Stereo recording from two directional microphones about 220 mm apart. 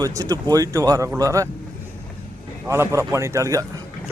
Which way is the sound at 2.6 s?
10° right (ahead or behind).